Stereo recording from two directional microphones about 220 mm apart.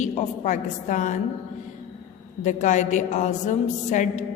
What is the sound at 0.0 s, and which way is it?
A woman's voice, 35° left (ahead or behind).